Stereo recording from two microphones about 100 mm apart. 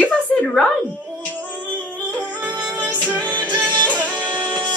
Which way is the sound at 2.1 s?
15° left (ahead or behind).